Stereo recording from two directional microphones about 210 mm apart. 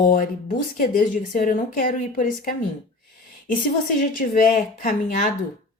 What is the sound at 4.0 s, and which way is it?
Speech, 40° left (ahead or behind).